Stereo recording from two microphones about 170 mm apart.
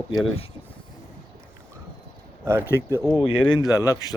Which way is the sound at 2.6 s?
15° left (ahead or behind).